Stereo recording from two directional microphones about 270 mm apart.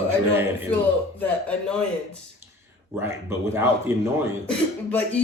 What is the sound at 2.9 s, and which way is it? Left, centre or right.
Speech, centre.